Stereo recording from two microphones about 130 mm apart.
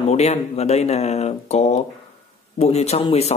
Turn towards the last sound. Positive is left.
turn(degrees=50)  # may be behind; listen again after turning